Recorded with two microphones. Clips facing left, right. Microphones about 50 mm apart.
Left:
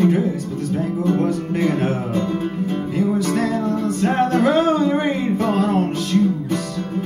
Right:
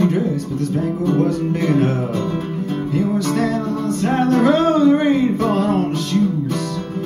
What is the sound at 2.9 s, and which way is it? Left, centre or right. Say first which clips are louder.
Music: right 1 dB; centre.